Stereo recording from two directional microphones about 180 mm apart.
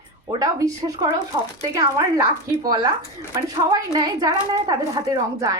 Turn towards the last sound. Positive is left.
turn(degrees=-20)  # may be behind; listen again after turning